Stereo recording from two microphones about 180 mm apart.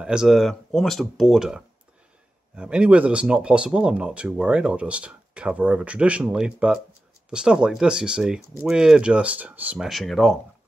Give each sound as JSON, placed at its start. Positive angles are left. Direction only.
{"t": 0.0, "sound": "speech", "side_deg": -5}